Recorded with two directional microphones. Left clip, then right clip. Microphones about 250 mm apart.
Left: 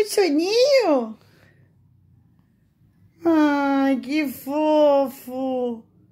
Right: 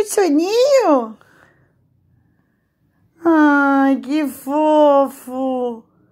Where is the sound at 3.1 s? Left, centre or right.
Centre.